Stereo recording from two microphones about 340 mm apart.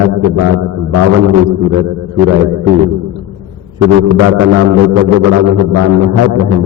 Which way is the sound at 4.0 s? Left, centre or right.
Right.